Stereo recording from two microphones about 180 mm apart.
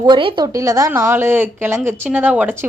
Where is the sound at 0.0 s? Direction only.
25° right (ahead or behind).